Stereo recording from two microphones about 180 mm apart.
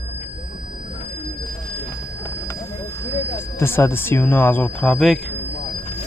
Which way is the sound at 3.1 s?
15° left (ahead or behind).